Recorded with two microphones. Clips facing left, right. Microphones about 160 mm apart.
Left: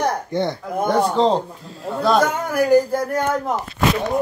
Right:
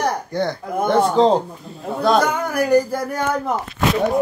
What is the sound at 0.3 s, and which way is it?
Speech, 20° left (ahead or behind).